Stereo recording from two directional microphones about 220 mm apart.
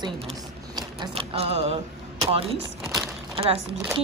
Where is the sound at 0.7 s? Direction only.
20° right (ahead or behind).